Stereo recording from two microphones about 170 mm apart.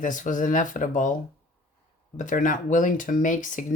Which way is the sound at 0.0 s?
50° left (ahead or behind).